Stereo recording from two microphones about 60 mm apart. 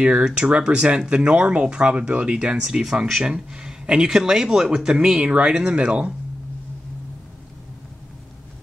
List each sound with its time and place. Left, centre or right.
0.0 s speech: centre